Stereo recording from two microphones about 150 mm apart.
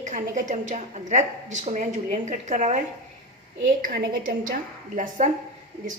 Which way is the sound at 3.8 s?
80° right.